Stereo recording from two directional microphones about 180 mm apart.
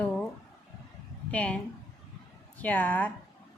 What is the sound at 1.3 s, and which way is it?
Speech, 5° left (ahead or behind).